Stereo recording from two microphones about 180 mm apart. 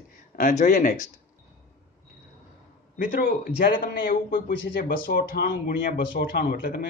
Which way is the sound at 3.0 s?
50° left (ahead or behind).